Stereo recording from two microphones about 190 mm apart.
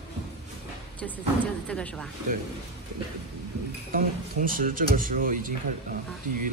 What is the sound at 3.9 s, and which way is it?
Speech, 45° right (ahead or behind).